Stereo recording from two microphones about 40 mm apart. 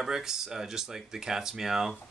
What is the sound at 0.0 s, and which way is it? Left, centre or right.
Speech, centre.